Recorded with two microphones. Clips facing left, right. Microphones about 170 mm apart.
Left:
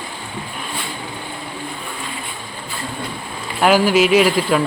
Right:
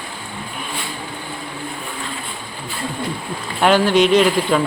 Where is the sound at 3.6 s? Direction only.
5° left (ahead or behind).